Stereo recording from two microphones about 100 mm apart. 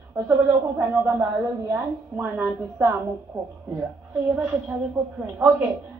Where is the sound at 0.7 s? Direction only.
20° right (ahead or behind).